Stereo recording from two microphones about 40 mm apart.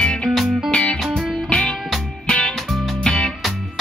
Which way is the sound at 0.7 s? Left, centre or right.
Left.